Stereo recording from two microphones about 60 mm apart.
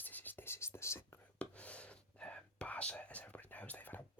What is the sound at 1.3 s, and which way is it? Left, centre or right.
Whispering, left.